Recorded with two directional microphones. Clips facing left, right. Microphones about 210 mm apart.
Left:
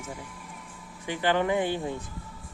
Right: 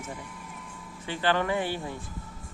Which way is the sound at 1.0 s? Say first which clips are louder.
Left 1 dB; 15° left (ahead or behind).